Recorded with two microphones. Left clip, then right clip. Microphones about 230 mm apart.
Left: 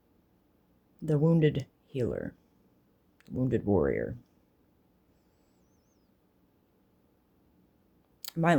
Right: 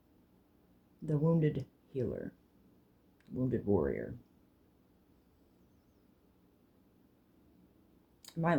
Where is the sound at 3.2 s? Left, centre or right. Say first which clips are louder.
Left 5 dB; left.